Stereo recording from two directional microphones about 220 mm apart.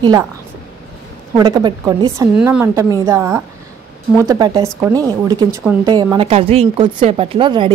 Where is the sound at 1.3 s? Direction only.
20° right (ahead or behind).